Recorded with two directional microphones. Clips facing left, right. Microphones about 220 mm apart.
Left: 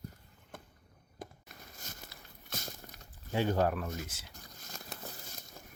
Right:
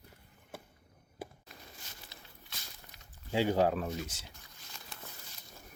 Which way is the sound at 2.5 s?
45° left (ahead or behind).